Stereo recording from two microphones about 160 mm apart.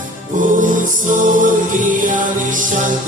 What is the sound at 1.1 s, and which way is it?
Music, 55° right (ahead or behind).